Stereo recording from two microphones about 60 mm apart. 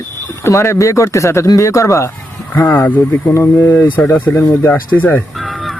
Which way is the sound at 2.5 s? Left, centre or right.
Left.